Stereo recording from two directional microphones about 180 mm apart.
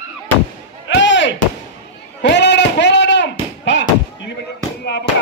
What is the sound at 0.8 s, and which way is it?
Slam, 90° left.